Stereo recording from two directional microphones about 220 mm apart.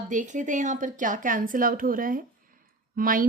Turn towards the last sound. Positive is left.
turn(degrees=-40)  # may be behind; listen again after turning